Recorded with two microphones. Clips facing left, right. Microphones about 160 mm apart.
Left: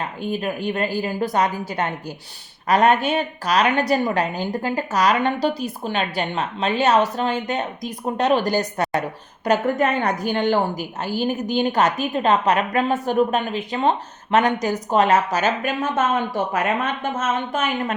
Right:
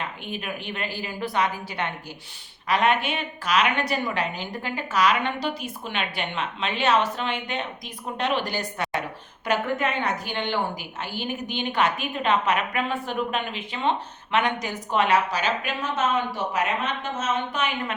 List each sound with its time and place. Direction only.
0.0 s a woman's voice: 40° left (ahead or behind)